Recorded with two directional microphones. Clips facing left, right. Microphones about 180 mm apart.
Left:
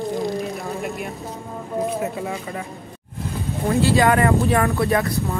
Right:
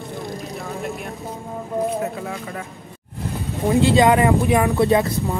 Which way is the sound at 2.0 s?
5° left (ahead or behind).